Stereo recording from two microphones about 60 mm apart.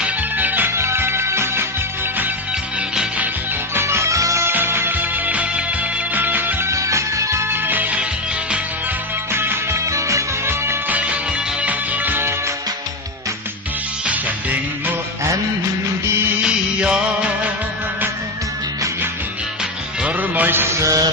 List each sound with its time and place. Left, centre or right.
0.0 s music: right
0.7 s music: right
3.8 s music: right
4.4 s music: right
4.9 s music: right
6.7 s music: right
7.5 s music: right
9.3 s music: right
10.8 s music: right
14.0 s music: right
16.0 s music of bollywood: right
16.4 s music: centre
20.0 s music: right
20.8 s music: right